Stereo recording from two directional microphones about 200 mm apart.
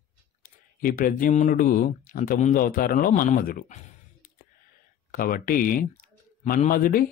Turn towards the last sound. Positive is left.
turn(degrees=45)  # may be behind; listen again after turning